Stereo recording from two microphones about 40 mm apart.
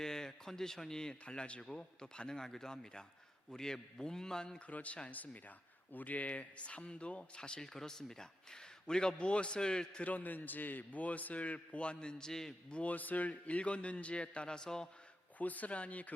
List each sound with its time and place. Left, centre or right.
0.0 s a sound: centre
1.2 s a man's voice: left
4.7 s a man's voice: left; by 10.0 s centre
10.0 s a man's voice: left; by 12.5 s centre
12.7 s a man's voice: left; by 14.8 s centre
15.4 s a man's voice: left